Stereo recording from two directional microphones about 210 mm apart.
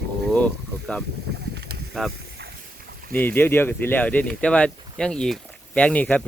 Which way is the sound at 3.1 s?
10° left (ahead or behind).